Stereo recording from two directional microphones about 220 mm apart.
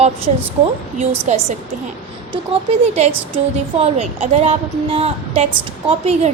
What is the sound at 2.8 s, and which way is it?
A woman's voice, 30° right (ahead or behind).